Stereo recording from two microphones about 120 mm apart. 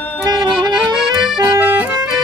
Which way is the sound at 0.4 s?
40° right (ahead or behind).